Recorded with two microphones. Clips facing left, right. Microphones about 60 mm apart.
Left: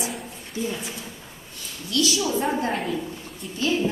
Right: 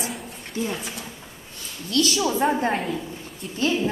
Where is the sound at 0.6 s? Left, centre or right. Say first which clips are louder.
Right 1 dB; right.